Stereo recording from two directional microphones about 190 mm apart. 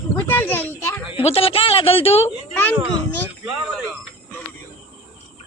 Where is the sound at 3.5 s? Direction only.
5° right (ahead or behind).